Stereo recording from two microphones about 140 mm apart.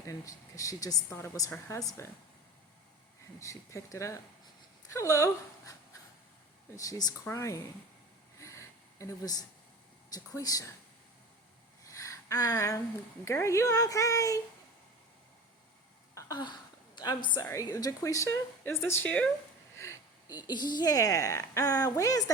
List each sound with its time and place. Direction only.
0.0 s speech: 25° left (ahead or behind)
3.4 s speech: 20° left (ahead or behind)
8.4 s a sound: 20° left (ahead or behind)
10.1 s speech: 25° left (ahead or behind)
11.8 s a sound: 20° left (ahead or behind)
13.2 s speech: 20° left (ahead or behind)
16.1 s a sound: 30° left (ahead or behind)
17.4 s speech: 25° left (ahead or behind)
19.7 s a woman's voice: 20° left (ahead or behind)